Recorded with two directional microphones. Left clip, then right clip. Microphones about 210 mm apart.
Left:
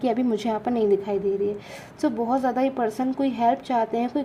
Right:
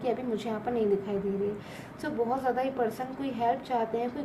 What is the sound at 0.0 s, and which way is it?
Speech, 50° left (ahead or behind).